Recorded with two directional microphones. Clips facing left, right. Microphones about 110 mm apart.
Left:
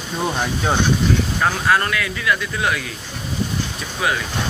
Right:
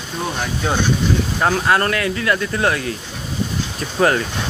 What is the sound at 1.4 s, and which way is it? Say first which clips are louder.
Speech: right 2 dB; 25° right (ahead or behind).